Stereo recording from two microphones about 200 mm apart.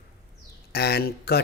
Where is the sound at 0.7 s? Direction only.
55° left (ahead or behind).